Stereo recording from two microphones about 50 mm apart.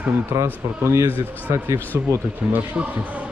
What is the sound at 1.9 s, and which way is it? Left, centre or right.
Speech, right.